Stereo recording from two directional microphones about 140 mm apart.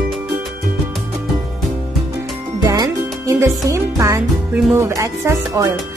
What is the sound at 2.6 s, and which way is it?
Music, 25° right (ahead or behind).